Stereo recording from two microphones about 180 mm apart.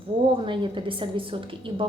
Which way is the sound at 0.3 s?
25° right (ahead or behind).